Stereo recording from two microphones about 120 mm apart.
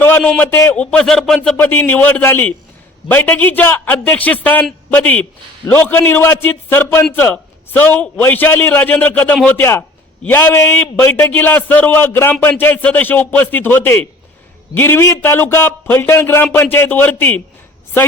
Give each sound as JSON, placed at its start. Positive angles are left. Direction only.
{"t": 0.2, "sound": "a man's voice", "side_deg": 5}
{"t": 0.5, "sound": "a man's voice", "side_deg": 15}
{"t": 1.5, "sound": "a man's voice", "side_deg": 15}